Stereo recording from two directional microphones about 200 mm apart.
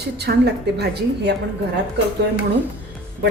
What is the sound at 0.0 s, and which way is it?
A woman's voice, 55° right (ahead or behind).